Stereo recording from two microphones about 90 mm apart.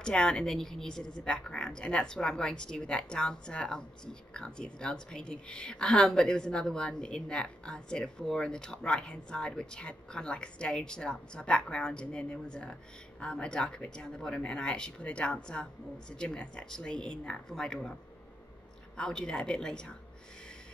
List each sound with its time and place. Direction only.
0.0 s a woman's voice: 10° left (ahead or behind)
18.9 s a woman's voice: 10° left (ahead or behind)